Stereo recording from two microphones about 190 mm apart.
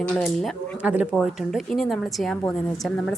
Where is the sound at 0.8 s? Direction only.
5° right (ahead or behind).